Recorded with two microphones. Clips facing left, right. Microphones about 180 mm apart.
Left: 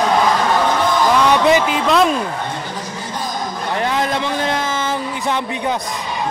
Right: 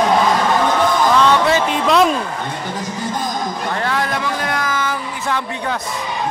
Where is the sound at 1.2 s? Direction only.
15° left (ahead or behind).